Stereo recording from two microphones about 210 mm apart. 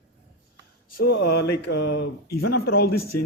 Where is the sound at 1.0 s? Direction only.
50° left (ahead or behind).